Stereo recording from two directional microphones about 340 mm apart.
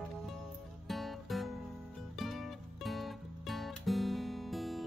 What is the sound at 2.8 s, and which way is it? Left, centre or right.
Music, centre.